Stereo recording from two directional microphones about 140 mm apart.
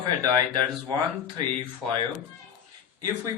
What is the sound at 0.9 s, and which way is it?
Speech, 30° right (ahead or behind).